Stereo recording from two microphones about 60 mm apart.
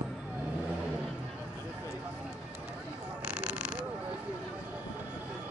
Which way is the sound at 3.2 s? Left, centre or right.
Centre.